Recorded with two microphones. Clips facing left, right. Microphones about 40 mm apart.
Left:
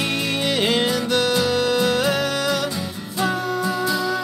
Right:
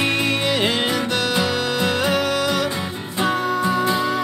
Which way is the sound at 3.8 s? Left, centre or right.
Right.